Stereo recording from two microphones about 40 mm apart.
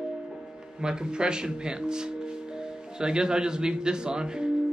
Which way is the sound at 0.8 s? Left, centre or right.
Right.